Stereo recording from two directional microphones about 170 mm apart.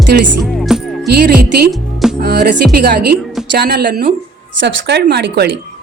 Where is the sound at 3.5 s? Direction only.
65° right (ahead or behind).